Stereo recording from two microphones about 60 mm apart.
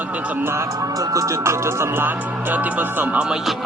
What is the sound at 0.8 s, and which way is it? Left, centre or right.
Music, right.